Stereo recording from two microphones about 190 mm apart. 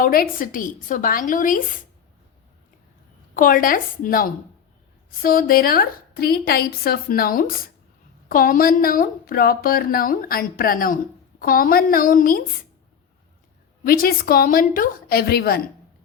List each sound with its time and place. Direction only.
0.0 s speech: 50° left (ahead or behind)
3.3 s speech: 45° left (ahead or behind)
13.8 s speech: 50° left (ahead or behind)